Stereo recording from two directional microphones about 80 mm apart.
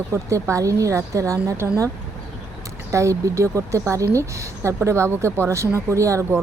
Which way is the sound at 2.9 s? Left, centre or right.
Right.